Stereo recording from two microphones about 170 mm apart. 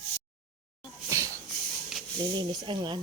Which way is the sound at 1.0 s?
20° right (ahead or behind).